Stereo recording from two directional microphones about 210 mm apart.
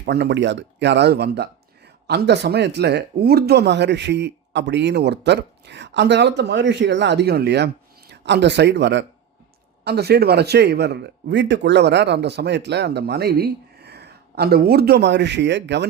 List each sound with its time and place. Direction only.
0.0 s speech: 50° right (ahead or behind)